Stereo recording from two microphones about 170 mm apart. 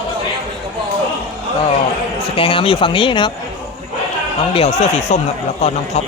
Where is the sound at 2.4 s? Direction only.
30° left (ahead or behind).